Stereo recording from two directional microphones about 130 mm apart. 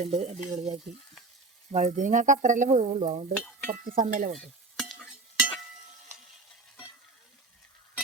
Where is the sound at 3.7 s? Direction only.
90° right.